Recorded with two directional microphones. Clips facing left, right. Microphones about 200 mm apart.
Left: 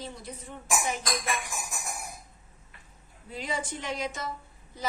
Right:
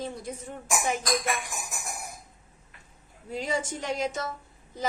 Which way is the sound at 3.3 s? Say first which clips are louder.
Right 4 dB; 45° right (ahead or behind).